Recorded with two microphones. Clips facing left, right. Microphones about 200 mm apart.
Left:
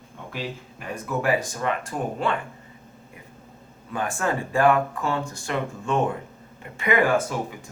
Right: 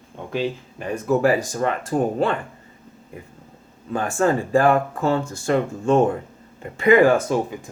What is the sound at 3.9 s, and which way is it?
Speech, 35° right (ahead or behind).